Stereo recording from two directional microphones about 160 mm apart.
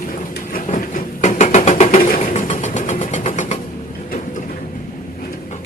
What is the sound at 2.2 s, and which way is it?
Vehicle, 50° left (ahead or behind).